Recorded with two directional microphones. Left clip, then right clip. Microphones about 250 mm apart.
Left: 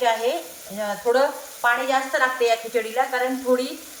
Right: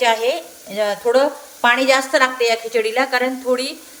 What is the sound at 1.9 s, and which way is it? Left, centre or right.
A woman's voice, right.